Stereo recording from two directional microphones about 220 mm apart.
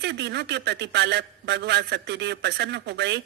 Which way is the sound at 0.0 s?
50° right (ahead or behind).